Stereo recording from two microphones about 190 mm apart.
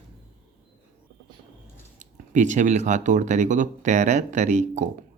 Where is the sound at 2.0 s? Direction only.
40° right (ahead or behind).